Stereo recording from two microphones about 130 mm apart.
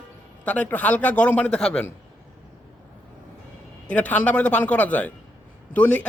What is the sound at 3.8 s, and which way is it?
A man's voice, 10° left (ahead or behind).